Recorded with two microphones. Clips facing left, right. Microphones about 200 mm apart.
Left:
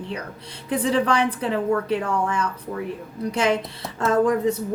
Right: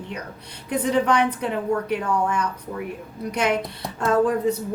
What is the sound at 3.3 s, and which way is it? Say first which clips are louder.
Speech: left 1 dB; 30° left (ahead or behind).